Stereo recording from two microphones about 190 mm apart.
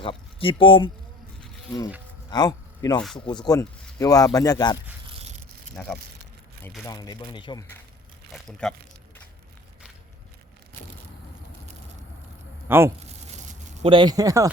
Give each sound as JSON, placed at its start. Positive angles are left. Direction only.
{"t": 0.0, "sound": "speech", "side_deg": 30}
{"t": 2.3, "sound": "speech", "side_deg": 20}
{"t": 5.8, "sound": "speech", "side_deg": 5}
{"t": 6.8, "sound": "speech", "side_deg": 20}
{"t": 8.3, "sound": "speech", "side_deg": 0}
{"t": 12.6, "sound": "speech", "side_deg": -10}
{"t": 13.2, "sound": "a sound", "side_deg": -40}
{"t": 13.9, "sound": "speech", "side_deg": -20}